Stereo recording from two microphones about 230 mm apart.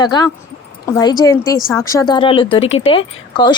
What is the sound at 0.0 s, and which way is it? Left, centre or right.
Speech, centre.